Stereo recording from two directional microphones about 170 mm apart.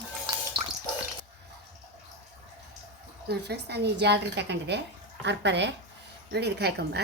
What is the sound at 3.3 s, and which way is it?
A woman's voice, 75° right (ahead or behind).